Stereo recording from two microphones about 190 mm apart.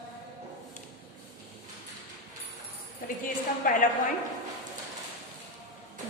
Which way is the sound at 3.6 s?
45° left (ahead or behind).